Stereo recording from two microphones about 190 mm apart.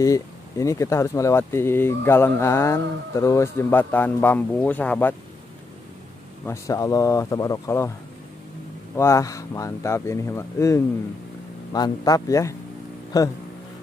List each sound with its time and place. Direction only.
0.0 s speech: 15° left (ahead or behind)
6.4 s speech: 15° left (ahead or behind)
8.9 s speech: 15° left (ahead or behind)